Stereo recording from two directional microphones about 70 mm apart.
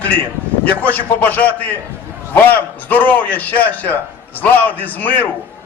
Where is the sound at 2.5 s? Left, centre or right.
Left.